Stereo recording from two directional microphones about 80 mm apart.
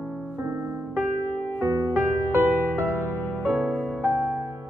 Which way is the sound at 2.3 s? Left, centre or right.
Right.